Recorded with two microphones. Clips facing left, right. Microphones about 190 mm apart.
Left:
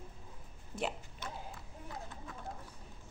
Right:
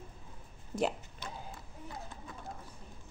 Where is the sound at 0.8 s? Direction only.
40° right (ahead or behind).